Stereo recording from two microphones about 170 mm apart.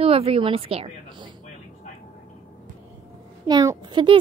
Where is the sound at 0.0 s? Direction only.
35° right (ahead or behind).